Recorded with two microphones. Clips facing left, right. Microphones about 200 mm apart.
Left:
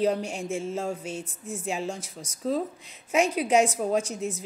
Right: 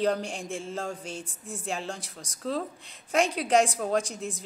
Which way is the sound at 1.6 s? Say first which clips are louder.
Left 3 dB; 5° left (ahead or behind).